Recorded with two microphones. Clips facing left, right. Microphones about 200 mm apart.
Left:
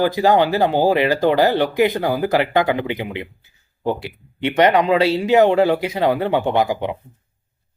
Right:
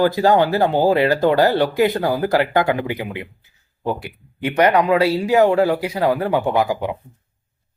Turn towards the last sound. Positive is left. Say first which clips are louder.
# even
turn(degrees=20)  # may be behind; listen again after turning